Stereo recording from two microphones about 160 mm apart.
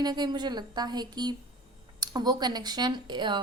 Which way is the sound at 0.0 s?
25° right (ahead or behind).